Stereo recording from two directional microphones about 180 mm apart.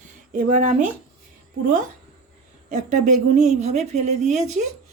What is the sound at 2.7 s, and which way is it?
Speech, 45° right (ahead or behind).